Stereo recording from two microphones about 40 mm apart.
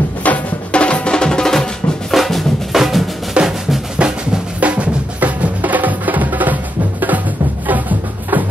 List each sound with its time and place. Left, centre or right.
0.2 s music: left; by 2.1 s centre
2.1 s drum: centre
2.7 s drum: centre
3.4 s drum: right